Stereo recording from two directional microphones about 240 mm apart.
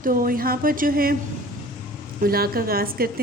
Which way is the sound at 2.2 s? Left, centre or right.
Right.